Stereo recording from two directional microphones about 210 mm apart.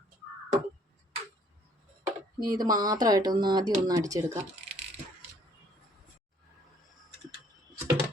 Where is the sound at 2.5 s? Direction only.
20° right (ahead or behind).